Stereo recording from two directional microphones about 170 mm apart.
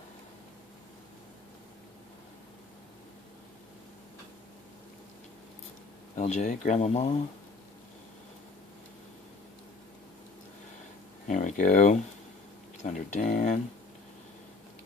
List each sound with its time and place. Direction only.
6.1 s speech: 45° left (ahead or behind)
11.3 s a sound: 45° left (ahead or behind)
12.8 s speech: 45° left (ahead or behind)